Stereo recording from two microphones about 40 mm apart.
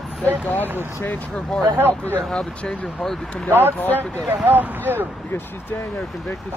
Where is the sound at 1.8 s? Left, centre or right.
Right.